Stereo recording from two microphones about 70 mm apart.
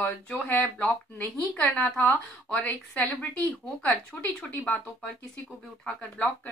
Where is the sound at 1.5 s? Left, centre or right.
Left.